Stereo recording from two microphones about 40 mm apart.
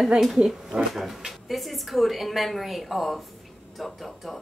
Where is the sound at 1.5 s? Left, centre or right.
Centre.